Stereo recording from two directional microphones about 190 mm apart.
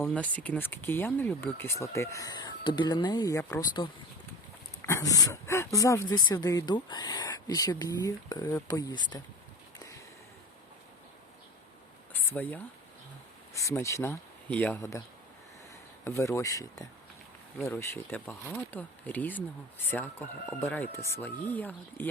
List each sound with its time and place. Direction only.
0.0 s speech: 5° left (ahead or behind); by 9.2 s 25° left (ahead or behind)
12.1 s a sound: 10° left (ahead or behind)
13.5 s speech: 15° left (ahead or behind)
16.0 s speech: 15° left (ahead or behind)